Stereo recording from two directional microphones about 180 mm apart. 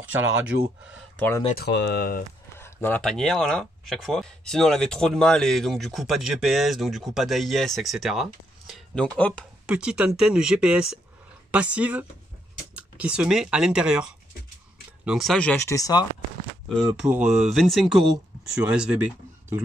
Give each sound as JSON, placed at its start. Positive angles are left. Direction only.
{"t": 0.1, "sound": "speech", "side_deg": -10}
{"t": 1.1, "sound": "speech", "side_deg": 10}
{"t": 1.6, "sound": "speech", "side_deg": 65}
{"t": 2.6, "sound": "speech", "side_deg": 10}
{"t": 9.7, "sound": "speech", "side_deg": -5}
{"t": 15.6, "sound": "speech", "side_deg": 20}
{"t": 16.6, "sound": "speech", "side_deg": 0}